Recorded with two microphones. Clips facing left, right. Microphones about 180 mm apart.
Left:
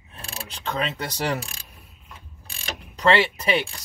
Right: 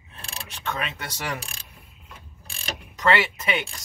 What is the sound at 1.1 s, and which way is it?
Speech, 35° left (ahead or behind).